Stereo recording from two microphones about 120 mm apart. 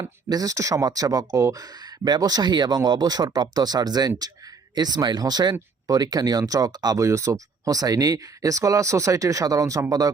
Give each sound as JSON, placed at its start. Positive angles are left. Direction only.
{"t": 0.0, "sound": "speech", "side_deg": -30}